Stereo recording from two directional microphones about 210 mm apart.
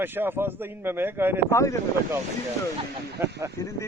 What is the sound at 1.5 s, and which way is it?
Speech, 15° left (ahead or behind).